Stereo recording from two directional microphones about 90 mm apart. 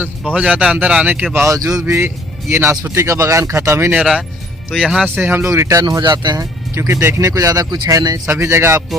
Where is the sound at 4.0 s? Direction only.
5° right (ahead or behind).